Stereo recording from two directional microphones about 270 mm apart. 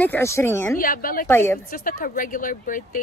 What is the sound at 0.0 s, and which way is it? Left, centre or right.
Speech, centre.